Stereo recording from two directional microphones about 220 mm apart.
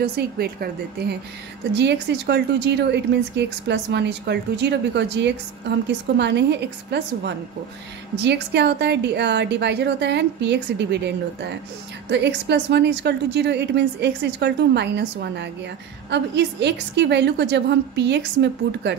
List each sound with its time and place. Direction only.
0.0 s a woman's voice: 45° right (ahead or behind)